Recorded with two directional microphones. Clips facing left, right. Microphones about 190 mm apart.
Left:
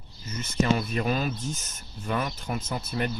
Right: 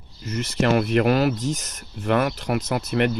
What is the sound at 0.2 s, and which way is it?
Speech, 75° right (ahead or behind).